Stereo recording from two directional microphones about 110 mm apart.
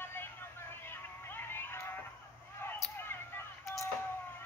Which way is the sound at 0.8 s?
20° left (ahead or behind).